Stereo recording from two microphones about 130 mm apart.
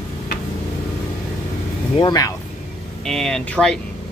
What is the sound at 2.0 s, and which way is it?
Speech, 30° left (ahead or behind).